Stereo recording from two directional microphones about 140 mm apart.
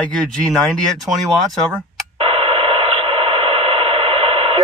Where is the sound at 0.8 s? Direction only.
Centre (ahead or behind).